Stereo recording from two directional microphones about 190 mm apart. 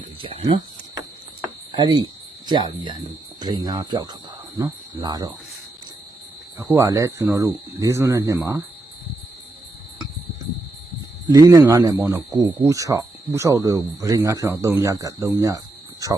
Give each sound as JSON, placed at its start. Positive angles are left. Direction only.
{"t": 0.2, "sound": "cricket", "side_deg": -25}
{"t": 1.7, "sound": "speech", "side_deg": -25}
{"t": 4.5, "sound": "cricket", "side_deg": -20}
{"t": 6.6, "sound": "speech", "side_deg": -15}
{"t": 11.3, "sound": "speech", "side_deg": -15}